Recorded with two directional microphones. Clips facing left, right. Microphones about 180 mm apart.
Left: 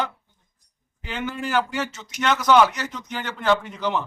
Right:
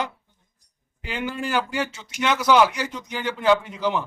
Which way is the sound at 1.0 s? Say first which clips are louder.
Right 1 dB; 10° right (ahead or behind).